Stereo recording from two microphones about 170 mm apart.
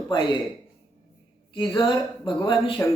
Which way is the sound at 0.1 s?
25° left (ahead or behind).